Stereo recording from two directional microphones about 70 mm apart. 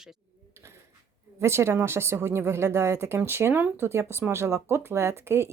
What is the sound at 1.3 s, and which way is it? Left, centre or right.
Speech, right.